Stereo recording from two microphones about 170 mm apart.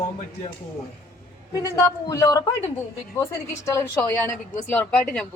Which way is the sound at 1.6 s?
20° left (ahead or behind).